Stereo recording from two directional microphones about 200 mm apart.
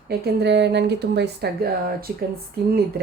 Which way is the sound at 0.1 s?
55° right (ahead or behind).